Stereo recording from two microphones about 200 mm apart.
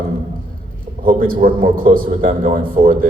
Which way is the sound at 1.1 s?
45° right (ahead or behind).